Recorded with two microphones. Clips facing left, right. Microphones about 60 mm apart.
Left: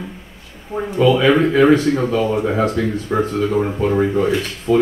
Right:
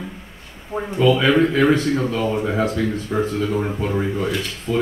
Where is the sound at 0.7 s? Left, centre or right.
Right.